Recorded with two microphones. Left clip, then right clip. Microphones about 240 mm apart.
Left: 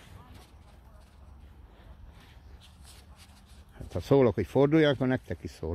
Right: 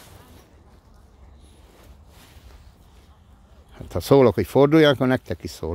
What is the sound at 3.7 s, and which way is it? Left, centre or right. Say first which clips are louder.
Speech: right 8 dB; right.